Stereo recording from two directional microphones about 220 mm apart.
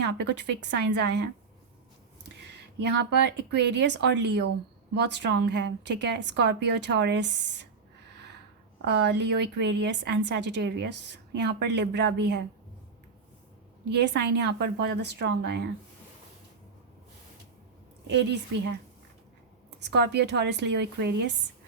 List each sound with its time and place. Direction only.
0.0 s a woman's voice: 50° right (ahead or behind)
2.7 s a woman's voice: 50° right (ahead or behind)
8.8 s a woman's voice: 50° right (ahead or behind)
13.9 s a woman's voice: 50° right (ahead or behind)
18.1 s a woman's voice: 50° right (ahead or behind)
19.8 s a woman's voice: 50° right (ahead or behind)